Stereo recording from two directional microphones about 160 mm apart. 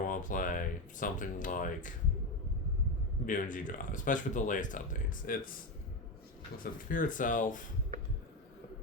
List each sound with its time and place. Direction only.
0.1 s speech: 55° left (ahead or behind)
3.2 s speech: 55° left (ahead or behind)
6.6 s speech: 60° left (ahead or behind)